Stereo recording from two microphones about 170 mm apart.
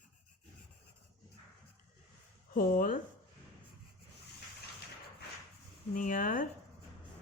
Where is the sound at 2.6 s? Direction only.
55° left (ahead or behind).